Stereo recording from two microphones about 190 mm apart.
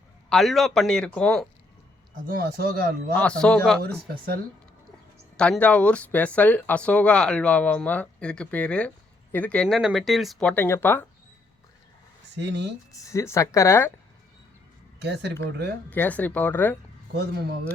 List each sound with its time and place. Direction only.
0.3 s speech: centre (ahead or behind)
2.2 s speech: 50° right (ahead or behind)
3.2 s speech: 5° left (ahead or behind)
5.4 s speech: 5° left (ahead or behind)
12.4 s speech: 65° right (ahead or behind)
12.9 s speech: 15° left (ahead or behind)
14.9 s speech: 65° right (ahead or behind)
15.9 s speech: 10° left (ahead or behind)
17.2 s speech: 60° right (ahead or behind)